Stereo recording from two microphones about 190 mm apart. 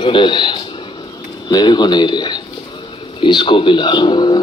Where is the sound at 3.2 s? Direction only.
25° left (ahead or behind).